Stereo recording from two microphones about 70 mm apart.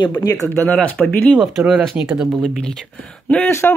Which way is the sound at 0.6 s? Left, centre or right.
Left.